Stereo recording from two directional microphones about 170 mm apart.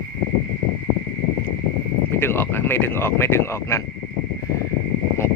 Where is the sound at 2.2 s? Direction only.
15° left (ahead or behind).